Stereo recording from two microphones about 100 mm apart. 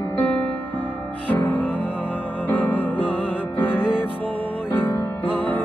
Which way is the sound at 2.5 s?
20° left (ahead or behind).